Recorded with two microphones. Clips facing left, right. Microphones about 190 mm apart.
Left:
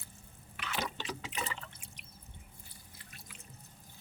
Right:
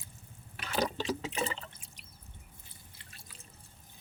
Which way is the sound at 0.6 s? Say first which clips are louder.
Right 6 dB; 35° right (ahead or behind).